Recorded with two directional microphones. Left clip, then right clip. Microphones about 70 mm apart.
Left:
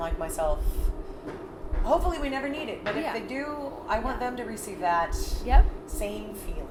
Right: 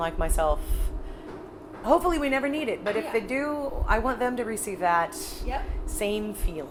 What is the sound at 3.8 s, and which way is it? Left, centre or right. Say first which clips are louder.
Speech: right 3 dB; right.